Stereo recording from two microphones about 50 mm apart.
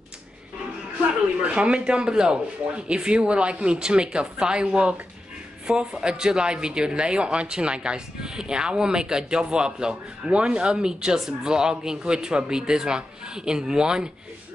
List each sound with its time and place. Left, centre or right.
1.4 s speech: right